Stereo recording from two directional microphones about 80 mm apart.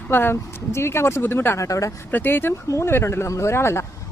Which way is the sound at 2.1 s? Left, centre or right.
Left.